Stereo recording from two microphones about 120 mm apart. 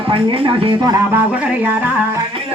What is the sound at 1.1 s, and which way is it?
Music, 10° right (ahead or behind).